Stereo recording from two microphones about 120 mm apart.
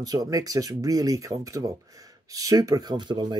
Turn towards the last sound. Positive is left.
turn(degrees=-40)  # may be behind; listen again after turning